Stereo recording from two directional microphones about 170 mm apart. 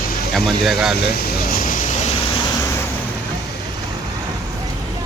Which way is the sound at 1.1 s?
60° left (ahead or behind).